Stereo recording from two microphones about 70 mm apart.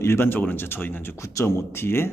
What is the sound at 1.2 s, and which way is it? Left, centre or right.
Speech, left.